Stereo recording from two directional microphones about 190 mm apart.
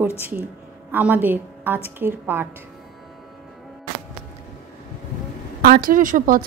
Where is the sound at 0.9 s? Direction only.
10° right (ahead or behind).